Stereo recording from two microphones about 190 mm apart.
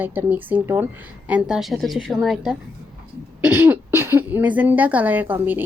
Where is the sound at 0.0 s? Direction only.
10° right (ahead or behind).